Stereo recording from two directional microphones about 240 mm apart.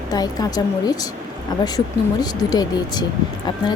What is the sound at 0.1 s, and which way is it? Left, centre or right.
Speech, centre.